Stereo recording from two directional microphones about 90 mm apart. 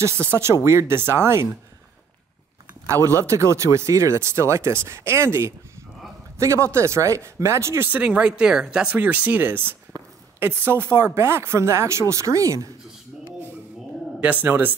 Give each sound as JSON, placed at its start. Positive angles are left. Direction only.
{"t": 0.0, "sound": "speech", "side_deg": -30}
{"t": 2.9, "sound": "speech", "side_deg": -35}
{"t": 7.9, "sound": "speech", "side_deg": -15}
{"t": 14.2, "sound": "speech", "side_deg": -20}